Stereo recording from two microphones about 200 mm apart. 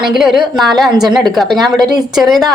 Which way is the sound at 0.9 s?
20° right (ahead or behind).